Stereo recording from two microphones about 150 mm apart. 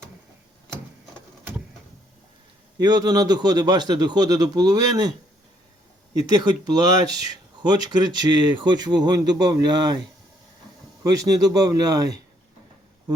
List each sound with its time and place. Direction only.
2.7 s speech: 25° right (ahead or behind)
6.1 s speech: 25° right (ahead or behind)
11.0 s speech: 25° right (ahead or behind)